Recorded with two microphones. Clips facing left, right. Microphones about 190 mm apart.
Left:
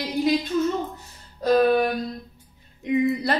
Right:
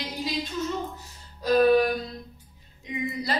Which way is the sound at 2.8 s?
60° left (ahead or behind).